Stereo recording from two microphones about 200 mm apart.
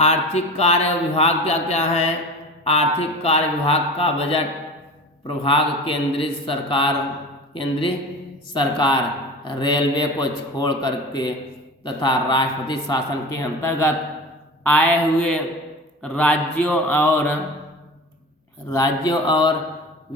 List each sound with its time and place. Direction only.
0.0 s a man's voice: 30° left (ahead or behind); by 17.3 s 10° left (ahead or behind)
18.7 s a man's voice: 20° left (ahead or behind)